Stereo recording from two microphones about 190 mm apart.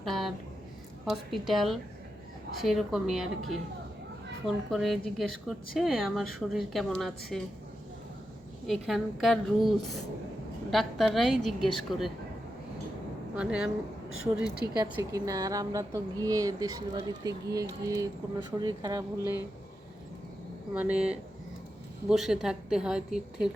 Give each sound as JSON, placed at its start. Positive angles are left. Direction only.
{"t": 0.0, "sound": "a sound", "side_deg": 0}
{"t": 1.0, "sound": "speech", "side_deg": 0}
{"t": 8.6, "sound": "speech", "side_deg": 0}
{"t": 13.3, "sound": "speech", "side_deg": -5}
{"t": 20.7, "sound": "speech", "side_deg": -5}